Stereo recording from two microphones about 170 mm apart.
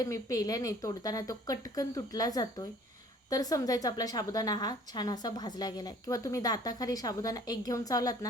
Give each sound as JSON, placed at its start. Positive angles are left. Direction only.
{"t": 0.0, "sound": "a woman's voice", "side_deg": 20}